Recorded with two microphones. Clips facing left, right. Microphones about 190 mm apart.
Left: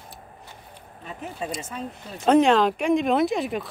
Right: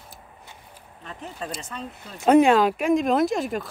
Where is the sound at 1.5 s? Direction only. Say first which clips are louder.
Left 2 dB; 5° left (ahead or behind).